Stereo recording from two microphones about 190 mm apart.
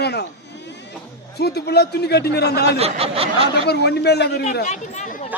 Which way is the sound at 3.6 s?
60° left (ahead or behind).